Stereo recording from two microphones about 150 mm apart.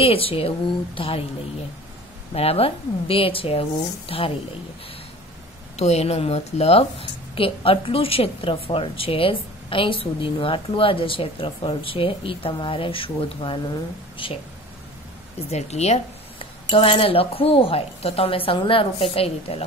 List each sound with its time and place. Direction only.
0.0 s a woman's voice: 40° left (ahead or behind)
2.3 s a woman's voice: 40° left (ahead or behind)
5.8 s a woman's voice: 45° left (ahead or behind)
15.5 s a woman's voice: 45° left (ahead or behind)